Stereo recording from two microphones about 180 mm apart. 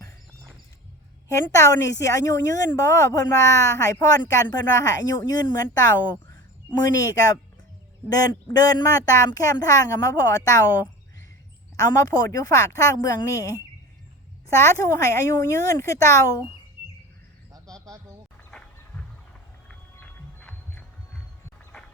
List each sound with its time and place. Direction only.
1.5 s a woman's voice: 15° left (ahead or behind)
8.4 s a woman's voice: 20° left (ahead or behind)
14.6 s speech: 15° left (ahead or behind)
19.6 s music: 10° left (ahead or behind)